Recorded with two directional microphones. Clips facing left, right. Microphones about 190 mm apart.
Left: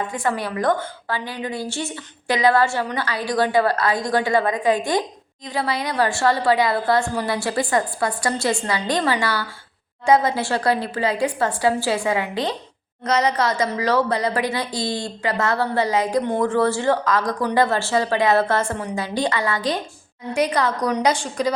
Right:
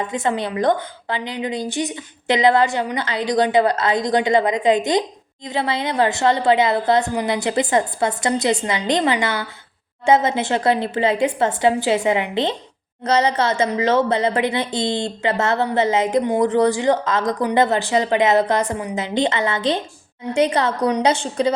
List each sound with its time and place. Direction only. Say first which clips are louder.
0.1 s a woman's voice: right 2 dB; 20° right (ahead or behind)